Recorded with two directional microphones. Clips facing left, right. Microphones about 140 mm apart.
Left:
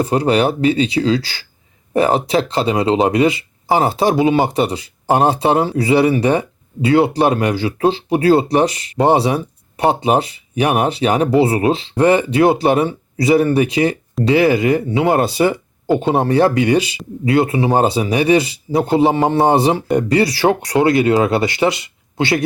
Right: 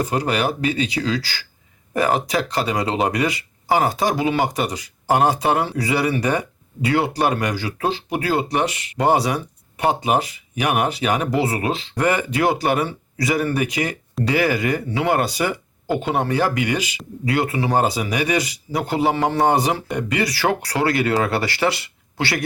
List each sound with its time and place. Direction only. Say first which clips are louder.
0.0 s speech: left 6 dB; 30° left (ahead or behind)
19.9 s speech: left 8 dB; 40° left (ahead or behind); by 22.4 s 20° left (ahead or behind)